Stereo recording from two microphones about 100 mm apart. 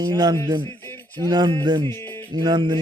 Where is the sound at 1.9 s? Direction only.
25° left (ahead or behind).